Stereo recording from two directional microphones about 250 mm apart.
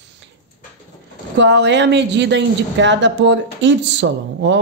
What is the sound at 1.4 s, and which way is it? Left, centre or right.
Speech, right.